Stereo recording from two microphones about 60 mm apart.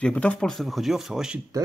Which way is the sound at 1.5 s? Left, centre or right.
Right.